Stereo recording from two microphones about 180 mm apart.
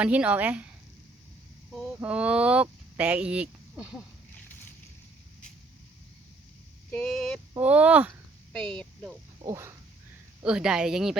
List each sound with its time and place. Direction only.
0.0 s speech: 5° right (ahead or behind)
1.7 s speech: 5° right (ahead or behind)
6.9 s speech: 5° left (ahead or behind)
7.5 s speech: 10° right (ahead or behind)
8.5 s speech: 5° left (ahead or behind)
9.4 s speech: 15° right (ahead or behind)
10.4 s speech: 5° right (ahead or behind)